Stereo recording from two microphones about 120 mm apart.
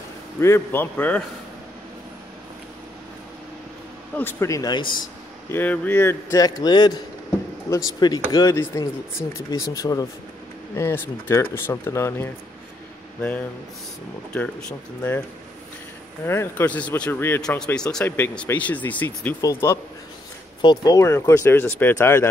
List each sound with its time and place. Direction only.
0.4 s speech: 20° left (ahead or behind)
4.2 s speech: 20° left (ahead or behind); by 4.9 s 35° left (ahead or behind)
5.5 s speech: 15° left (ahead or behind)
6.3 s a man's voice: 35° left (ahead or behind)
14.3 s speech: 10° left (ahead or behind)
16.3 s speech: 20° left (ahead or behind)
17.4 s speech: 5° left (ahead or behind)
18.0 s speech: 15° left (ahead or behind)
19.4 s speech: 25° left (ahead or behind)